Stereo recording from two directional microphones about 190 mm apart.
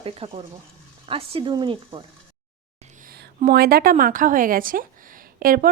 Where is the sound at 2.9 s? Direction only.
55° right (ahead or behind).